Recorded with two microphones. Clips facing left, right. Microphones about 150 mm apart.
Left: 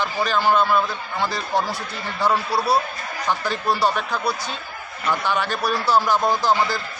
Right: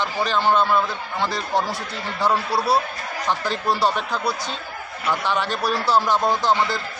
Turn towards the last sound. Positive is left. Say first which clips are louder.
# even
turn(degrees=5)  # may be behind; listen again after turning